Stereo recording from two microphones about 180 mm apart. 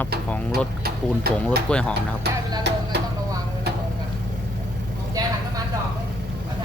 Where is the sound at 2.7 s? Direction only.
70° right (ahead or behind).